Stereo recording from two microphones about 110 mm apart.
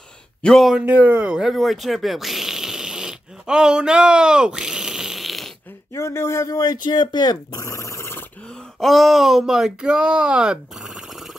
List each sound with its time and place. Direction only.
0.4 s speech: centre (ahead or behind)
0.8 s speech: 15° right (ahead or behind)
5.9 s speech: 25° left (ahead or behind)
8.7 s speech: centre (ahead or behind)